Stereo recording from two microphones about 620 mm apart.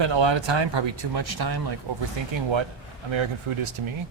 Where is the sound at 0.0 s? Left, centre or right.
Right.